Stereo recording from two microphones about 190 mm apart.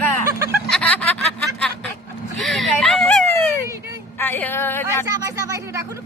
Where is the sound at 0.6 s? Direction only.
5° left (ahead or behind).